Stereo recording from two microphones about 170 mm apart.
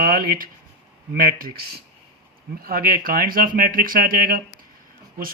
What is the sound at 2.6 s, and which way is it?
Speech, 60° right (ahead or behind).